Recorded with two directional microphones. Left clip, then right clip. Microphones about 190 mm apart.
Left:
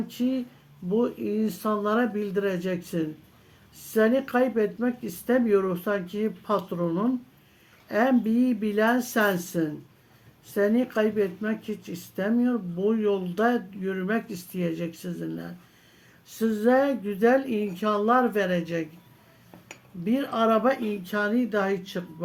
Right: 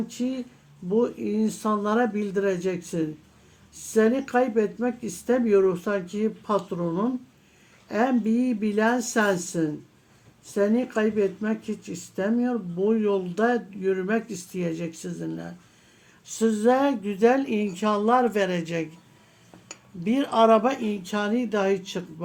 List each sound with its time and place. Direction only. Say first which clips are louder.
0.1 s speech: left 2 dB; 30° right (ahead or behind)
20.1 s speech: right 5 dB; 35° right (ahead or behind)